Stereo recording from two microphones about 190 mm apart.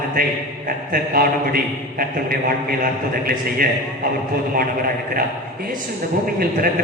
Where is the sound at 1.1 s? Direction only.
50° right (ahead or behind).